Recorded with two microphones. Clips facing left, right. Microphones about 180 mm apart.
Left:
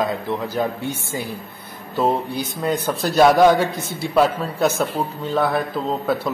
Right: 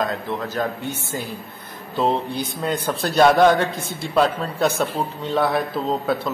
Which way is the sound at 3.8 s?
55° right (ahead or behind).